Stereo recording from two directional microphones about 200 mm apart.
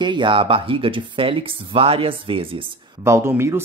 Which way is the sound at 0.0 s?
25° right (ahead or behind).